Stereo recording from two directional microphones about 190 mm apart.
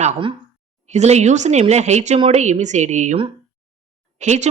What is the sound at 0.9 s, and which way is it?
Speech, 35° right (ahead or behind).